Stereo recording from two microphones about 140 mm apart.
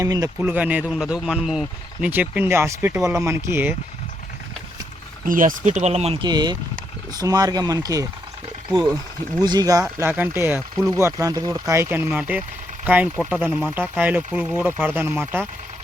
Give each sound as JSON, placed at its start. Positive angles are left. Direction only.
{"t": 0.0, "sound": "speech", "side_deg": -25}
{"t": 0.4, "sound": "speech", "side_deg": -10}
{"t": 5.2, "sound": "speech", "side_deg": -75}
{"t": 6.2, "sound": "speech", "side_deg": -30}
{"t": 9.4, "sound": "speech", "side_deg": -30}
{"t": 10.0, "sound": "speech", "side_deg": -15}